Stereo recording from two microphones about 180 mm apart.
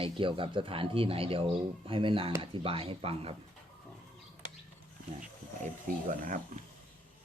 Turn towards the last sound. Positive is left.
turn(degrees=-45)  # may be behind; listen again after turning